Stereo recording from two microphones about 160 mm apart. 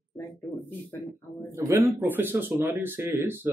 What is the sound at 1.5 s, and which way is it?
Speech, 15° right (ahead or behind).